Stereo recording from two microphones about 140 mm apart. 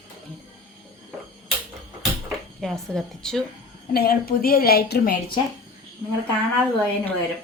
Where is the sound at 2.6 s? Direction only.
Centre (ahead or behind).